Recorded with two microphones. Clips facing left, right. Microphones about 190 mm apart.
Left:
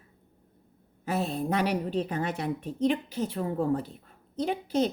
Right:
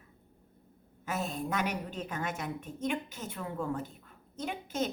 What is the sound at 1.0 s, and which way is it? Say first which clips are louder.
A woman's voice: left 6 dB; 35° left (ahead or behind).